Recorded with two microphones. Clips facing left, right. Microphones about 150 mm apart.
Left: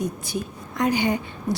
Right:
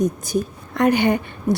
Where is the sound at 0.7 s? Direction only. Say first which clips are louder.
Right 5 dB; 60° right (ahead or behind).